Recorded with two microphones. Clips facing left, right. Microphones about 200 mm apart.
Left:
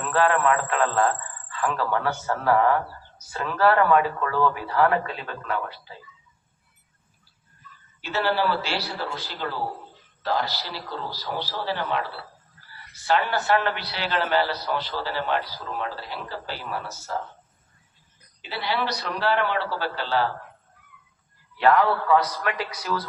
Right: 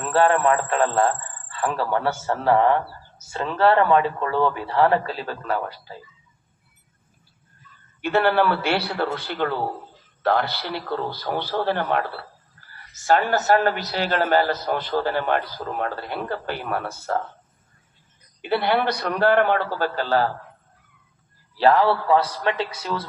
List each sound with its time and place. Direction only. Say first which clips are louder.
0.1 s a man's voice: right 3 dB; 30° right (ahead or behind)
8.0 s a man's voice: right 5 dB; 55° right (ahead or behind)
18.4 s a man's voice: right 7 dB; 55° right (ahead or behind)
21.5 s speech: right 2 dB; 30° right (ahead or behind)